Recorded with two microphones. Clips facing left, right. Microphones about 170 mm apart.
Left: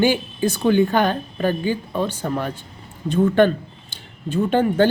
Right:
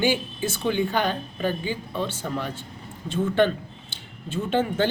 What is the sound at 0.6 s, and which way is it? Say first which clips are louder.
Speech: left 7 dB; 50° left (ahead or behind).